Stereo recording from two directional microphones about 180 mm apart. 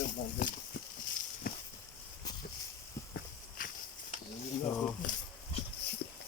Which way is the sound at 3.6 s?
50° left (ahead or behind).